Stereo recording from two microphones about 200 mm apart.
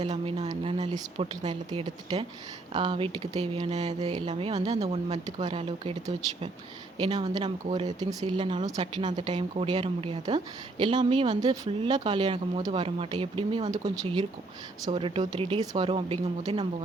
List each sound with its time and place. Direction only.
0.0 s speech: 30° right (ahead or behind)
7.0 s speech: 25° right (ahead or behind)